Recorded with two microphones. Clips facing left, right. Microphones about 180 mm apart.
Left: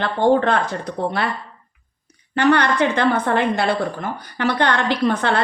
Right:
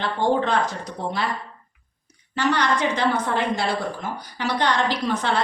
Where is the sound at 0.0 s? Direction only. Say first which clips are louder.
Left 5 dB; 55° left (ahead or behind).